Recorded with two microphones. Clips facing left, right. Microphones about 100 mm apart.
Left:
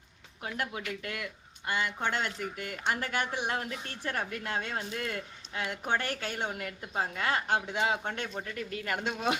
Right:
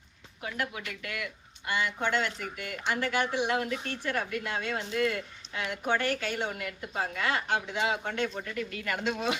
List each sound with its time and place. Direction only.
0.5 s speech: 40° left (ahead or behind)